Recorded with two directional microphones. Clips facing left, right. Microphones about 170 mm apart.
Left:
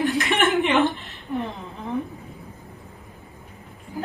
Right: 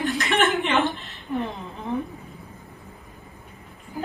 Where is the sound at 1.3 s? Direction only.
Centre (ahead or behind).